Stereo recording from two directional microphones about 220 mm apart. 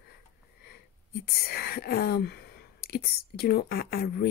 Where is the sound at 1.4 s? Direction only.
45° left (ahead or behind).